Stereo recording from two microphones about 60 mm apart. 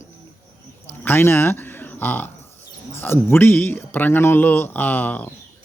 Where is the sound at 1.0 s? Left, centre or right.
Left.